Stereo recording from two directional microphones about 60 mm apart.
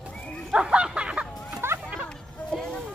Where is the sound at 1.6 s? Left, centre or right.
Right.